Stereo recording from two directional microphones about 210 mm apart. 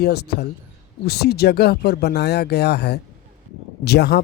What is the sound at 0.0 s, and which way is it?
Speech, 50° left (ahead or behind).